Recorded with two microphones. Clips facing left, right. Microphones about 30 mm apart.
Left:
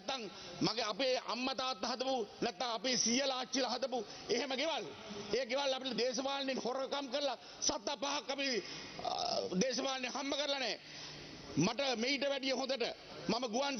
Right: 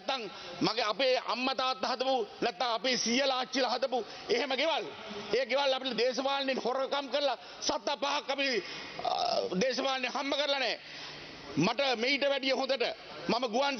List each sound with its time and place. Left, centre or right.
0.2 s a man's voice: right